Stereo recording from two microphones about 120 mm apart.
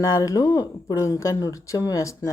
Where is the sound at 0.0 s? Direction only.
30° left (ahead or behind).